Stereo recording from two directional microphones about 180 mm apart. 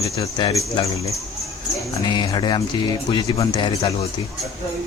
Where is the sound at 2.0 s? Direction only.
25° left (ahead or behind).